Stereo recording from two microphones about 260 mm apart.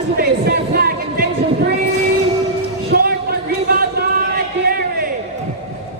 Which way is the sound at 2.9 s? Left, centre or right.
Right.